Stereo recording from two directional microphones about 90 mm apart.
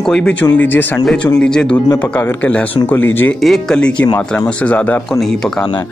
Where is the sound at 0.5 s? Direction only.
20° left (ahead or behind).